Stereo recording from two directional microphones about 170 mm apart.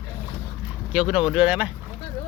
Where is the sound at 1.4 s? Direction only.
5° right (ahead or behind).